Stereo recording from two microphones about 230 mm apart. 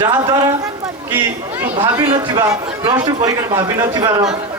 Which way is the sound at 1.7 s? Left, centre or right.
Right.